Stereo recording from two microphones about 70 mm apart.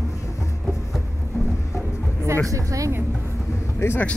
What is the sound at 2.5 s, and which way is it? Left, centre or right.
Speech, right.